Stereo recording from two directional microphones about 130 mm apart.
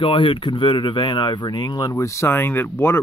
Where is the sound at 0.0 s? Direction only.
40° left (ahead or behind).